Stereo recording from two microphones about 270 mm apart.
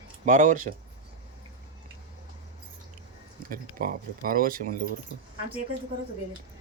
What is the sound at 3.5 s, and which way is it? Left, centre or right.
Speech, right.